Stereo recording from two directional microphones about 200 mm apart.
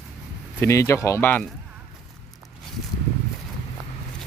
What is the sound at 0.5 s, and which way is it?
Speech, 15° left (ahead or behind).